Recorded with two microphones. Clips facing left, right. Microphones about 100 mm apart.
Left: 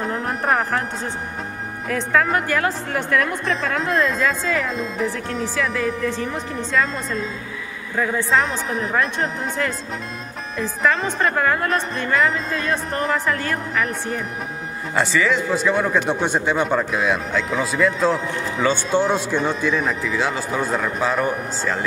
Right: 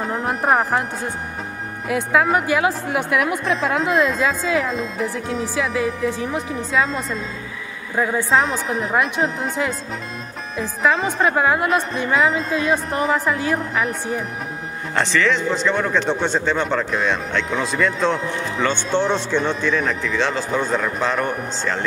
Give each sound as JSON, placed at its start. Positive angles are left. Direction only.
{"t": 0.0, "sound": "speech", "side_deg": 0}
{"t": 1.9, "sound": "speech", "side_deg": -10}
{"t": 7.9, "sound": "a woman's voice", "side_deg": -15}
{"t": 8.3, "sound": "a woman's voice", "side_deg": 0}
{"t": 15.0, "sound": "a man's voice", "side_deg": 5}